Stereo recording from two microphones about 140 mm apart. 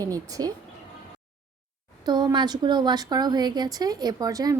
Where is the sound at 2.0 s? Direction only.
30° right (ahead or behind).